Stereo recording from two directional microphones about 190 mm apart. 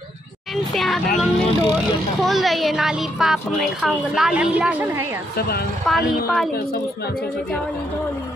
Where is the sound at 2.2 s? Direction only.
Centre (ahead or behind).